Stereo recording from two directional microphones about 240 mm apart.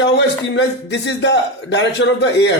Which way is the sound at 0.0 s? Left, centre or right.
Left.